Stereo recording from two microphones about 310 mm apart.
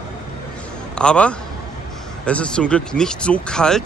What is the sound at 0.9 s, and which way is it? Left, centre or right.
A man's voice, centre.